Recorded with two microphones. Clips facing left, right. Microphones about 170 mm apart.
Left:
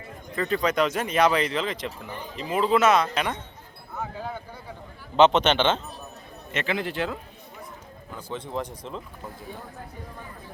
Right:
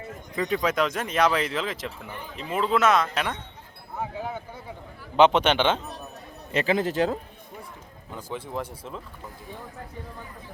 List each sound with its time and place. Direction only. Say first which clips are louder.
0.3 s speech: left 1 dB; 10° right (ahead or behind)
4.2 s a man's voice: right 1 dB; 15° right (ahead or behind)
6.5 s speech: right 4 dB; 35° right (ahead or behind)
8.3 s a man's voice: left 1 dB; 5° right (ahead or behind)